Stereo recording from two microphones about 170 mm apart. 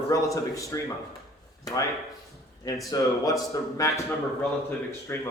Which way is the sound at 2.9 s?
20° left (ahead or behind).